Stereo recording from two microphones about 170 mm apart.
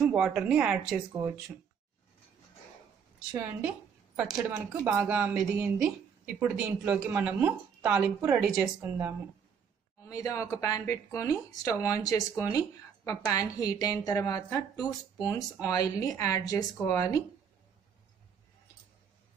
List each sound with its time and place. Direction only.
0.0 s a woman's voice: 10° right (ahead or behind)
3.3 s a woman's voice: 10° right (ahead or behind)
10.0 s a woman's voice: 20° left (ahead or behind)